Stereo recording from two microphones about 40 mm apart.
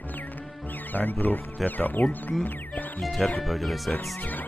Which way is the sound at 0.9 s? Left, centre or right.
Left.